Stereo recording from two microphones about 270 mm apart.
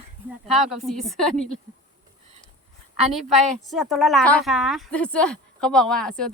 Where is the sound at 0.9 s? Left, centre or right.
Centre.